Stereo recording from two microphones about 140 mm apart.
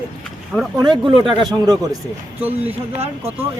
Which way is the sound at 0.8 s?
35° right (ahead or behind).